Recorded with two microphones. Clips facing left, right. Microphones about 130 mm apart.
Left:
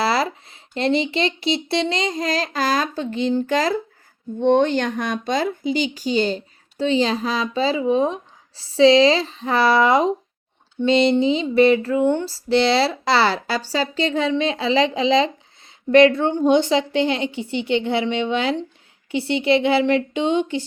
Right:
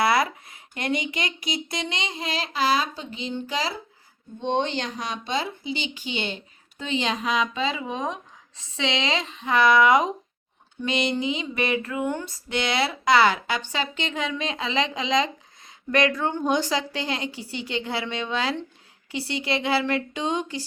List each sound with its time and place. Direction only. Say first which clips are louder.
0.0 s a woman's voice: left 1 dB; 30° left (ahead or behind)